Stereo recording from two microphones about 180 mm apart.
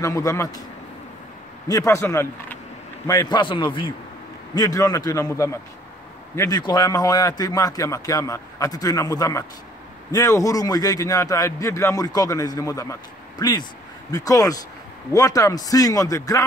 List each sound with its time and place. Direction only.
0.0 s speech: 15° left (ahead or behind)
1.7 s a man's voice: 15° left (ahead or behind)